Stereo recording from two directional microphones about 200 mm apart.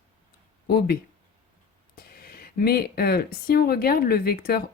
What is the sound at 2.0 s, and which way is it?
Speech, 50° left (ahead or behind).